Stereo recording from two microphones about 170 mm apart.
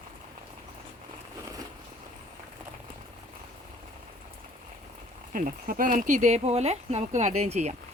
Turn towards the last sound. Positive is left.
turn(degrees=-40)  # may be behind; listen again after turning